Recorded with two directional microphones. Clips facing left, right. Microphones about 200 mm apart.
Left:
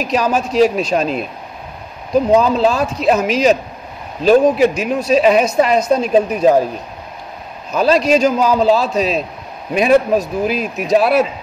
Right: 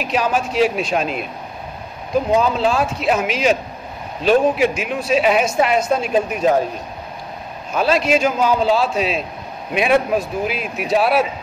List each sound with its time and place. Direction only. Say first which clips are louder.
0.0 s a woman's voice: left 3 dB; 40° left (ahead or behind)
2.5 s a woman's voice: left 3 dB; 40° left (ahead or behind)
7.8 s a woman's voice: left 4 dB; 40° left (ahead or behind)